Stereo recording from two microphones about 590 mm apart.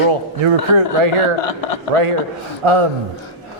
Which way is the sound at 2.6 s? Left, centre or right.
Right.